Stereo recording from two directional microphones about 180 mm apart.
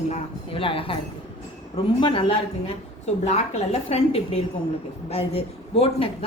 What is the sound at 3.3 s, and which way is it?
A woman's voice, 35° left (ahead or behind).